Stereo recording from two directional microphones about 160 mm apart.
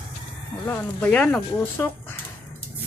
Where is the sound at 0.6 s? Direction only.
15° left (ahead or behind).